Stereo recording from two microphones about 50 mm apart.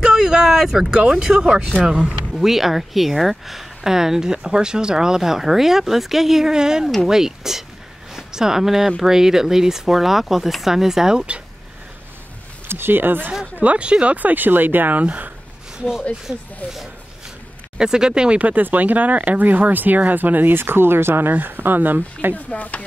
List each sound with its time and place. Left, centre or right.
0.0 s a sound: centre
0.9 s speech: centre
2.3 s speech: centre
12.6 s speech: right
13.6 s speech: right
14.1 s speech: right
17.7 s speech: centre
18.4 s speech: right
21.3 s speech: right
22.3 s speech: left